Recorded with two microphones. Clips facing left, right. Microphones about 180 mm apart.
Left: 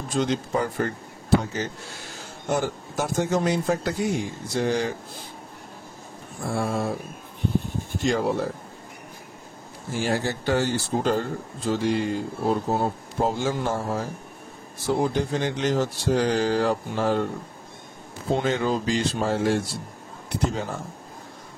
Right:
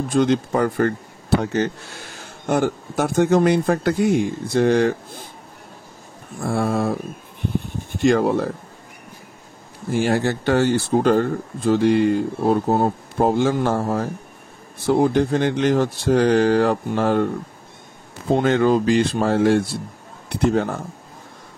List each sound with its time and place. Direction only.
0.1 s speech: 55° right (ahead or behind)
6.4 s speech: 60° right (ahead or behind)
8.0 s speech: 60° right (ahead or behind)
9.8 s speech: 60° right (ahead or behind)
18.3 s speech: 60° right (ahead or behind)